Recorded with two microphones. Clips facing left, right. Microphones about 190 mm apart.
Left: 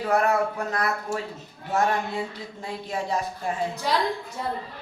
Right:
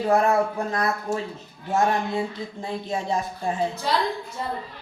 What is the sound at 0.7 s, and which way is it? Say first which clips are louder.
Speech: right 2 dB; 25° right (ahead or behind).